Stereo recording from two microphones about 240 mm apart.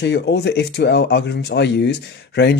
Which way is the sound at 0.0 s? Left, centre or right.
Left.